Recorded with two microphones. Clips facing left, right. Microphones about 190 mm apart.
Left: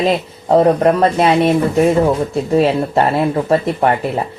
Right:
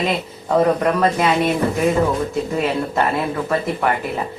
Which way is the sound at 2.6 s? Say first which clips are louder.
Left 7 dB; 30° left (ahead or behind).